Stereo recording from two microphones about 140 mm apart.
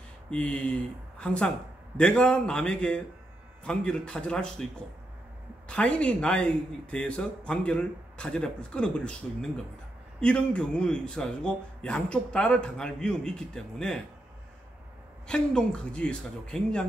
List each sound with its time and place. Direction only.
0.3 s speech: 10° left (ahead or behind)
5.7 s speech: 5° left (ahead or behind)
15.2 s speech: 5° left (ahead or behind)